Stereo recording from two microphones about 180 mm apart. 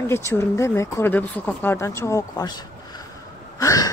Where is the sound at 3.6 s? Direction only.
20° left (ahead or behind).